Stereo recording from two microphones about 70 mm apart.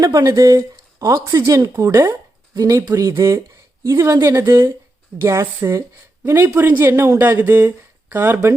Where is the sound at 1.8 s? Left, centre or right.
Right.